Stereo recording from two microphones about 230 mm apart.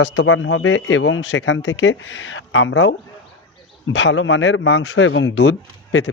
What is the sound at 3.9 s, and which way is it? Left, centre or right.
A man's voice, left.